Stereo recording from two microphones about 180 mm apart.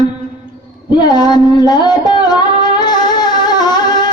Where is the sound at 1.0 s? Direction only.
25° left (ahead or behind).